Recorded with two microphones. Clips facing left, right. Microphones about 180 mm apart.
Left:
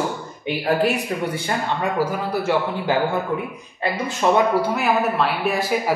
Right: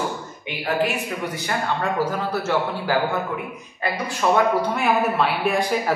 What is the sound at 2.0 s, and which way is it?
Speech, 10° left (ahead or behind).